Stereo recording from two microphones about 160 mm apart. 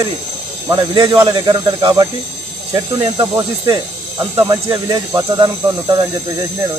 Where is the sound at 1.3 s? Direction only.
30° right (ahead or behind).